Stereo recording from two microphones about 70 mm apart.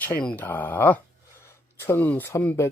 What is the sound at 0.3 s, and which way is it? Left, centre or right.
Speech, left.